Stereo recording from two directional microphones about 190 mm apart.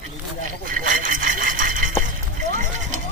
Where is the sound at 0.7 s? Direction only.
45° right (ahead or behind).